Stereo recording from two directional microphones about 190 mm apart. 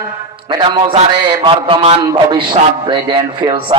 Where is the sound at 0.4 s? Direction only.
25° right (ahead or behind).